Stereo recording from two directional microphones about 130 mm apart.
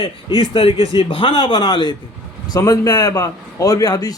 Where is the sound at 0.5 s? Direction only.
45° left (ahead or behind).